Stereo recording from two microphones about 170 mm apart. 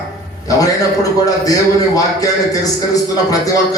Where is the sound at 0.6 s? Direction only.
20° left (ahead or behind).